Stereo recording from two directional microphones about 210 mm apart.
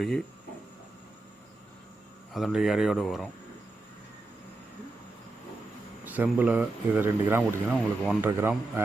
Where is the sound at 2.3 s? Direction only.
Centre (ahead or behind).